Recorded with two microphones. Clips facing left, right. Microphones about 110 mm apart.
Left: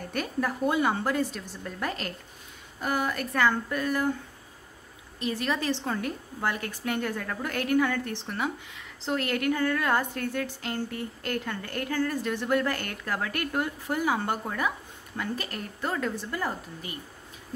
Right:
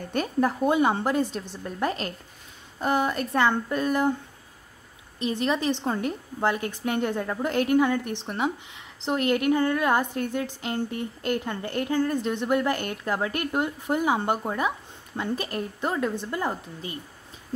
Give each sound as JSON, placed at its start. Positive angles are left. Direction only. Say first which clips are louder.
{"t": 0.1, "sound": "a woman's voice", "louder": "right 6 dB", "side_deg": -25}
{"t": 5.2, "sound": "a woman's voice", "louder": "right 4 dB", "side_deg": -20}